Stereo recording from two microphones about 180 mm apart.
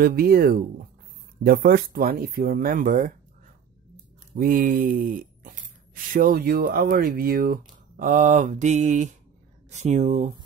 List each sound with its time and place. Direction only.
0.0 s speech: 55° right (ahead or behind)
4.4 s speech: 50° right (ahead or behind)